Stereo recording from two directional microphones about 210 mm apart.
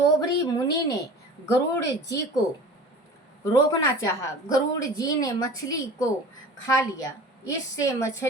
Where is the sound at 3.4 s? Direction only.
15° left (ahead or behind).